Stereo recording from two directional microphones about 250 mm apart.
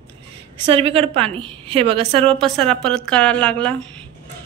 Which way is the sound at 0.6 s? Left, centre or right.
Right.